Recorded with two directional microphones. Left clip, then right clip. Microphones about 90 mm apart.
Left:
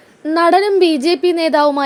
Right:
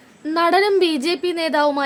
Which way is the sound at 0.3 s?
30° left (ahead or behind).